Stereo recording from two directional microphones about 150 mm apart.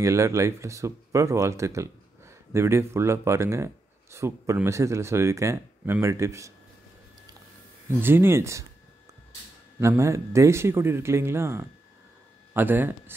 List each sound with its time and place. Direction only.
0.0 s speech: 20° right (ahead or behind)
8.0 s a man's voice: 15° right (ahead or behind)
9.8 s a man's voice: 20° right (ahead or behind)